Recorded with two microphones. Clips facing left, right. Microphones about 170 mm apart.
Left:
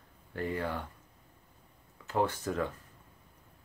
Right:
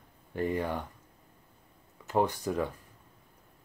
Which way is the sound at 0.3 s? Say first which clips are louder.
Right 3 dB; 15° right (ahead or behind).